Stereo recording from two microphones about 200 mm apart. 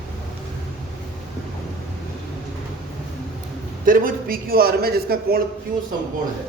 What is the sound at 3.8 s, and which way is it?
A man's voice, 45° right (ahead or behind).